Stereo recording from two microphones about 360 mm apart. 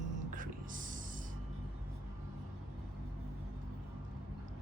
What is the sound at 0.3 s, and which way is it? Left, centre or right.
Music, right.